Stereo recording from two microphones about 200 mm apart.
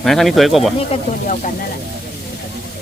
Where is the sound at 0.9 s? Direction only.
35° left (ahead or behind).